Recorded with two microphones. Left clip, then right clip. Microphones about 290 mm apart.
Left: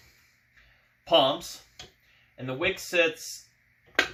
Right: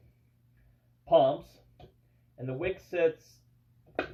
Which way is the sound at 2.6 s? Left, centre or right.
Left.